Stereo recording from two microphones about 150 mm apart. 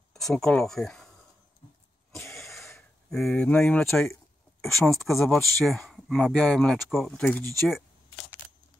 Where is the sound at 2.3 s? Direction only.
Centre (ahead or behind).